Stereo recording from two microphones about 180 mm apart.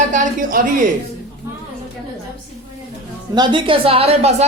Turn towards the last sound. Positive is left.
turn(degrees=-35)  # may be behind; listen again after turning